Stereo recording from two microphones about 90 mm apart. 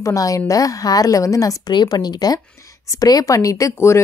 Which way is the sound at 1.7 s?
50° left (ahead or behind).